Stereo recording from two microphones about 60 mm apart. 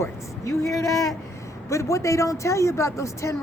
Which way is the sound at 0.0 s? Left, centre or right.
Left.